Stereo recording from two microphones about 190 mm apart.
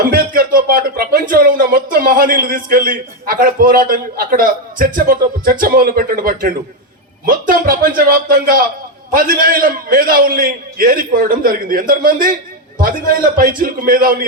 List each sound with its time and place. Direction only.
0.0 s speech: 50° right (ahead or behind)